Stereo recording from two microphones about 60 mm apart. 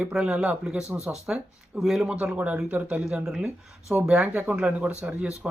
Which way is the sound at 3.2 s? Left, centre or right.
Centre.